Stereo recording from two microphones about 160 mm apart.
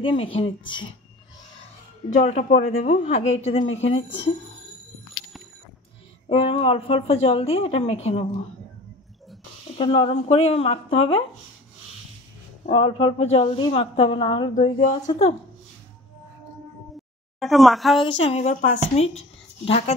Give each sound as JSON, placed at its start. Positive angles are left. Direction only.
{"t": 0.0, "sound": "a woman's voice", "side_deg": 35}
{"t": 2.1, "sound": "a woman's voice", "side_deg": 45}
{"t": 6.2, "sound": "a woman's voice", "side_deg": 35}
{"t": 9.8, "sound": "a woman's voice", "side_deg": 35}
{"t": 12.6, "sound": "a woman's voice", "side_deg": 35}
{"t": 17.4, "sound": "speech", "side_deg": 0}
{"t": 18.0, "sound": "a woman's voice", "side_deg": 40}